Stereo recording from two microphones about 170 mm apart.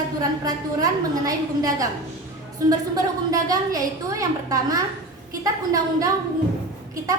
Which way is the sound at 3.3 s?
20° right (ahead or behind).